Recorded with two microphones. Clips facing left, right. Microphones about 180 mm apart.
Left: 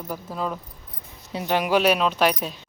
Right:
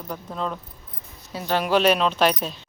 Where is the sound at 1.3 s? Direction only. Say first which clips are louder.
Even; 20° left (ahead or behind).